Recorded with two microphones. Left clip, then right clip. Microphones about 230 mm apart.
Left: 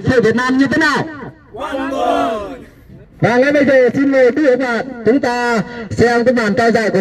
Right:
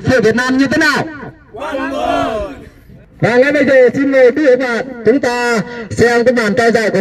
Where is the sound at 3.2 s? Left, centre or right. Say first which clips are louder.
Right 1 dB; right.